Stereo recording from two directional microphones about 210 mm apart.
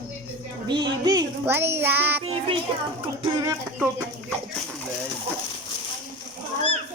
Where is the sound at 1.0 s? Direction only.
15° right (ahead or behind).